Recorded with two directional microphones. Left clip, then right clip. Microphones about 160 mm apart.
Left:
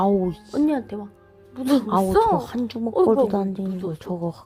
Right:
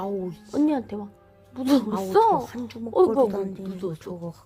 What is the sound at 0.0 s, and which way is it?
Speech, 35° left (ahead or behind).